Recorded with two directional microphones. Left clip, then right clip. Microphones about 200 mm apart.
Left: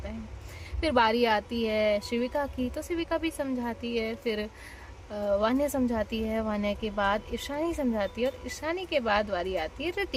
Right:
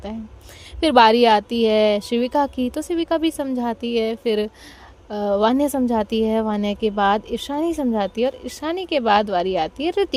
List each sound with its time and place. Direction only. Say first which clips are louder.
0.8 s a woman's voice: right 11 dB; 35° right (ahead or behind)